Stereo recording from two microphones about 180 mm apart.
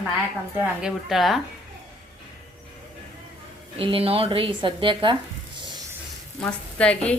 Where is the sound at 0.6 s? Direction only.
5° right (ahead or behind).